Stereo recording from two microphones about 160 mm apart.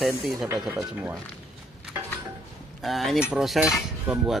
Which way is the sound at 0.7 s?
10° right (ahead or behind).